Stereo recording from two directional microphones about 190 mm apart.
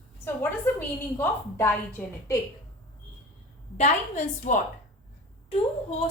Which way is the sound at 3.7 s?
35° left (ahead or behind).